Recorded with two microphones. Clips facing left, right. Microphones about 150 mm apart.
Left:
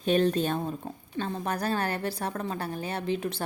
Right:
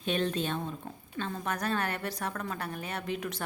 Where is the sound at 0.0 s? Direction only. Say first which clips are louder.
Left 6 dB; 40° left (ahead or behind).